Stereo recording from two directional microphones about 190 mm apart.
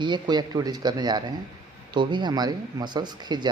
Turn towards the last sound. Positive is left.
turn(degrees=-20)  # may be behind; listen again after turning